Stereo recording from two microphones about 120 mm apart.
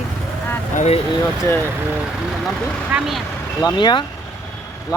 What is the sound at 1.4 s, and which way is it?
Speech, 20° left (ahead or behind).